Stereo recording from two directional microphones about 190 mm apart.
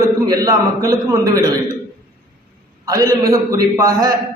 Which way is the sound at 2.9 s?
15° right (ahead or behind).